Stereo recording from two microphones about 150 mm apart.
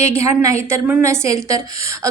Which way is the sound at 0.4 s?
20° right (ahead or behind).